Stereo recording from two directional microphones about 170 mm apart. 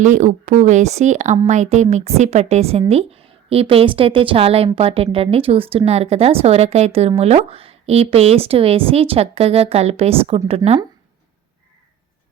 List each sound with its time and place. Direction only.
0.0 s a woman's voice: 45° right (ahead or behind)